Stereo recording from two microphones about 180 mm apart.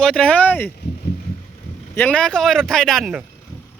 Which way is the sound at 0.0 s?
5° left (ahead or behind).